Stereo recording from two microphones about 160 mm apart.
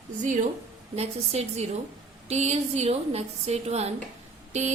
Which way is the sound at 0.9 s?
40° right (ahead or behind).